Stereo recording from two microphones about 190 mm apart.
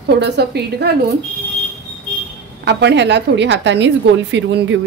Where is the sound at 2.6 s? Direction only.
65° right (ahead or behind).